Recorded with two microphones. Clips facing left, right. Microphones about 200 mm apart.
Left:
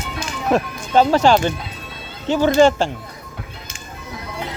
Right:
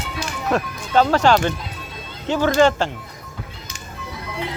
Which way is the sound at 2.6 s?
10° left (ahead or behind).